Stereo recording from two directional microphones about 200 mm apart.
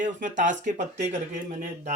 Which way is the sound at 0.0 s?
40° right (ahead or behind).